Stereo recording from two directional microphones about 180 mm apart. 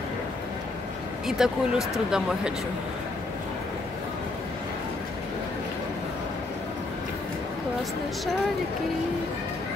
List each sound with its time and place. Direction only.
1.2 s speech: 5° right (ahead or behind)